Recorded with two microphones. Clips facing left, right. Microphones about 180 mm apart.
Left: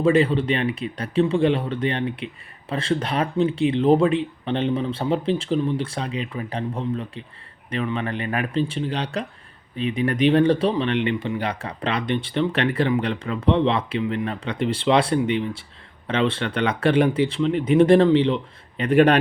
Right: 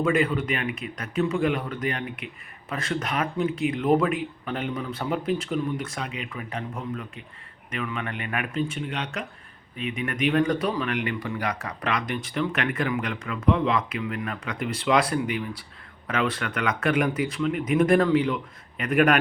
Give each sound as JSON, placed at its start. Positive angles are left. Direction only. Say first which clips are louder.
{"t": 0.0, "sound": "speech", "louder": "left 5 dB", "side_deg": 30}